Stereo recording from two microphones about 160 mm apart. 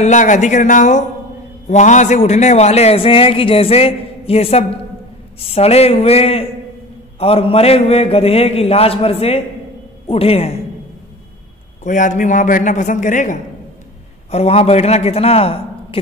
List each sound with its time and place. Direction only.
0.0 s a man's voice: 50° left (ahead or behind)
11.8 s a man's voice: 55° left (ahead or behind)
14.3 s a man's voice: 40° left (ahead or behind)